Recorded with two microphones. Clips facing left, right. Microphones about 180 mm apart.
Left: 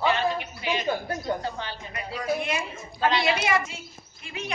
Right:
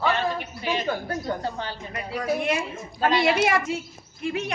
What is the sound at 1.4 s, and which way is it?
Speech, 45° right (ahead or behind).